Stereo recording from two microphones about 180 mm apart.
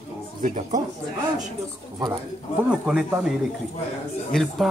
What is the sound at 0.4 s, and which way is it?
Speech, 45° right (ahead or behind).